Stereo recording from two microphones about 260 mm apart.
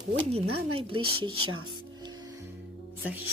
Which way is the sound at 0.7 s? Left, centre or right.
Right.